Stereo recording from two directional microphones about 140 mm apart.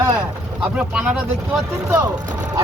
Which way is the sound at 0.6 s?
5° right (ahead or behind).